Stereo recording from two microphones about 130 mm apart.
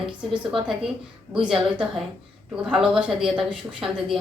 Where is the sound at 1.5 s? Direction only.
5° right (ahead or behind).